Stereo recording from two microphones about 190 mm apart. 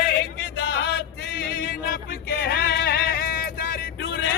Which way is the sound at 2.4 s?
55° left (ahead or behind).